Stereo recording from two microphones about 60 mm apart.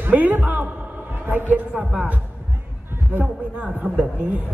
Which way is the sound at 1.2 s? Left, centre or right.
Right.